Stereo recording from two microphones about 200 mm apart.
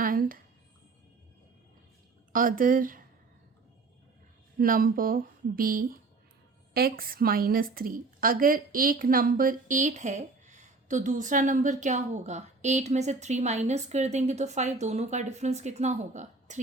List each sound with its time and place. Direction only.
0.0 s a sound: 45° right (ahead or behind)
2.3 s speech: 45° right (ahead or behind)
4.5 s a woman's voice: 45° right (ahead or behind)